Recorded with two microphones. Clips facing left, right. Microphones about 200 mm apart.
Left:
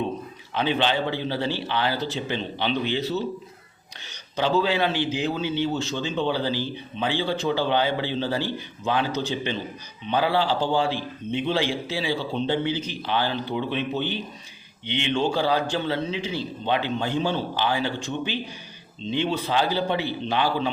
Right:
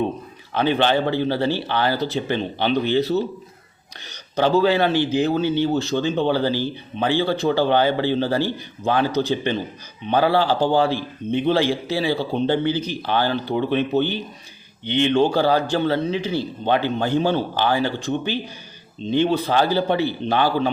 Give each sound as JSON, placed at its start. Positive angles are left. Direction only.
{"t": 0.5, "sound": "a man's voice", "side_deg": -50}
{"t": 4.4, "sound": "a man's voice", "side_deg": -50}